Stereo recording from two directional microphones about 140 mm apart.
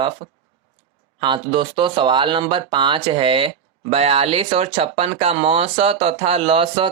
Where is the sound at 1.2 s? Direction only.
35° right (ahead or behind).